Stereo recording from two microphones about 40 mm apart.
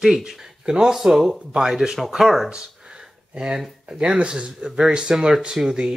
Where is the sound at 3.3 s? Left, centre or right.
Right.